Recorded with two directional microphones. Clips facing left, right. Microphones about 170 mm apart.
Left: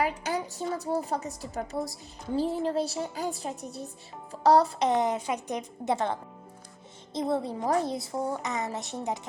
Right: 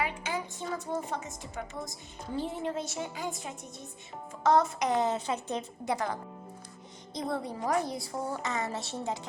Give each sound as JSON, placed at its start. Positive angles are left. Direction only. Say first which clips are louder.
{"t": 0.0, "sound": "a woman's voice", "louder": "left 4 dB", "side_deg": 40}
{"t": 4.9, "sound": "a woman's voice", "louder": "left 2 dB", "side_deg": 20}